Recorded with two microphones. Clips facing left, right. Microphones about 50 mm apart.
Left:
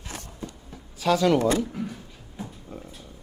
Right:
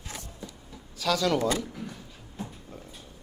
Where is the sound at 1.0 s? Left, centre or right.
Left.